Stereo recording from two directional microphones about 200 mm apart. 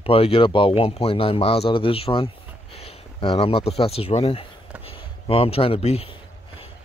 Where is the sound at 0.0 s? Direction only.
30° left (ahead or behind).